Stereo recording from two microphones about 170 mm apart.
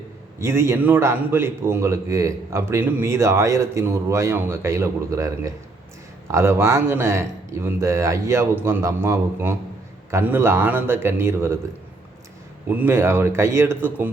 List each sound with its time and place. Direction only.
0.3 s a man's voice: 15° right (ahead or behind)
12.6 s a man's voice: 10° right (ahead or behind)